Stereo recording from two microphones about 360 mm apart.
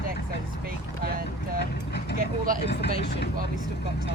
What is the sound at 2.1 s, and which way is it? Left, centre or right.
Speech, right.